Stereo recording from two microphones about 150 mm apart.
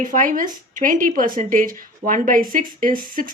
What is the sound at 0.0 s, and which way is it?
Speech, 60° right (ahead or behind).